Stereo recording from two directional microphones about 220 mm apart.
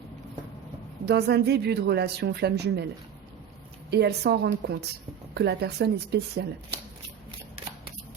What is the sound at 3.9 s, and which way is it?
Speech, 50° right (ahead or behind).